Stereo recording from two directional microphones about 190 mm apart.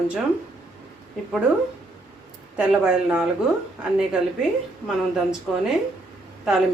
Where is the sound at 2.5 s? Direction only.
5° right (ahead or behind).